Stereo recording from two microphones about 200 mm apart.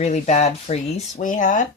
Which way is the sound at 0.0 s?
35° left (ahead or behind).